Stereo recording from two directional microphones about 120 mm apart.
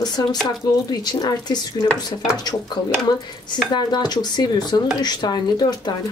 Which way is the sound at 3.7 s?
35° left (ahead or behind).